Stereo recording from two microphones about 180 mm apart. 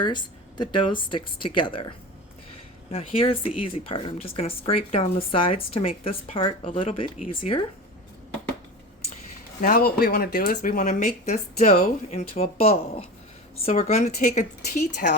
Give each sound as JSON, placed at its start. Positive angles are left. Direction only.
{"t": 0.0, "sound": "speech", "side_deg": 25}
{"t": 2.9, "sound": "speech", "side_deg": 30}
{"t": 9.6, "sound": "speech", "side_deg": 55}